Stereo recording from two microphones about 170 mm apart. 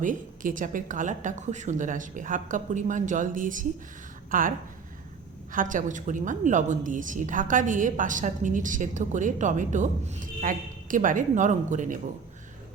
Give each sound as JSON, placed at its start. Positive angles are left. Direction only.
{"t": 0.0, "sound": "a woman's voice", "side_deg": -50}